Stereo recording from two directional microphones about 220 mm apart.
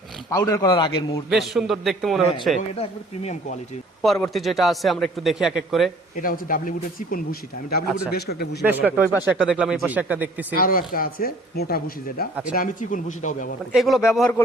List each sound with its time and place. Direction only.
0.3 s speech: 15° left (ahead or behind)
1.3 s a man's voice: centre (ahead or behind)
4.0 s a man's voice: centre (ahead or behind)
6.2 s speech: 40° left (ahead or behind)
8.6 s speech: 10° right (ahead or behind)
10.6 s speech: 40° left (ahead or behind)
13.7 s a man's voice: centre (ahead or behind)